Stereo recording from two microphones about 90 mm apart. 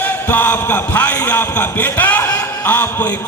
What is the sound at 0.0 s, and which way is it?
A man's voice, 20° left (ahead or behind).